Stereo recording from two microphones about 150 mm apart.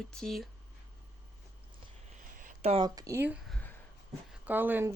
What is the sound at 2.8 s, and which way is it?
Speech, 25° right (ahead or behind).